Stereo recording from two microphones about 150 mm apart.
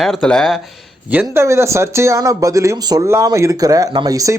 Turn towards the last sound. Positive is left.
turn(degrees=-25)  # may be behind; listen again after turning